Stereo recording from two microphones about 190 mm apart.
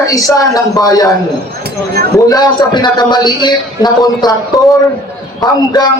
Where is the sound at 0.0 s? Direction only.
15° left (ahead or behind).